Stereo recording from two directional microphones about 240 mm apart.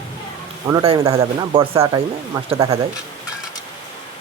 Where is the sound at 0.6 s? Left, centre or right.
Centre.